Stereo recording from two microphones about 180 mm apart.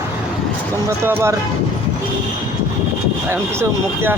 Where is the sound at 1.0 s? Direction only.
15° right (ahead or behind).